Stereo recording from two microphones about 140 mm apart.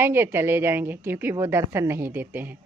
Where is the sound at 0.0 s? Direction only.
15° right (ahead or behind).